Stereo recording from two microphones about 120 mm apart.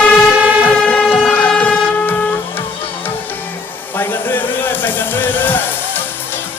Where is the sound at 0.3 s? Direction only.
15° right (ahead or behind).